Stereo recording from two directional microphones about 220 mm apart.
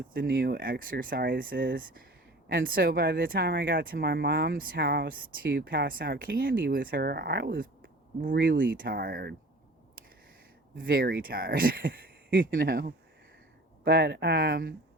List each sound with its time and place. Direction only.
0.1 s speech: 40° right (ahead or behind)
2.6 s speech: 40° right (ahead or behind)
10.8 s speech: 40° right (ahead or behind)